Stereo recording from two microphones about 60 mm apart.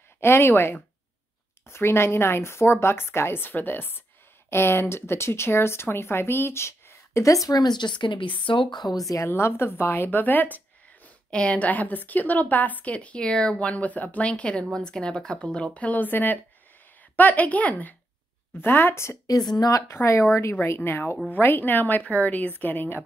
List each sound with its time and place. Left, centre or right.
0.2 s speech: left
8.8 s speech: left
9.3 s speech: left
11.2 s a woman's voice: centre
18.6 s speech: left
19.2 s a woman's voice: left
19.9 s a woman's voice: left